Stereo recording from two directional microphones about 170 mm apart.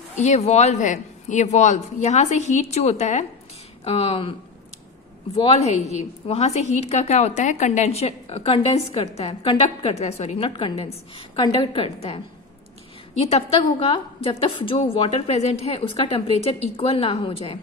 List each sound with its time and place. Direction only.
0.2 s a woman's voice: 40° left (ahead or behind)
13.2 s a woman's voice: 35° left (ahead or behind)